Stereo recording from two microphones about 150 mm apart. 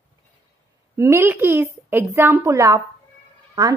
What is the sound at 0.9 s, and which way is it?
A woman's voice, 15° right (ahead or behind).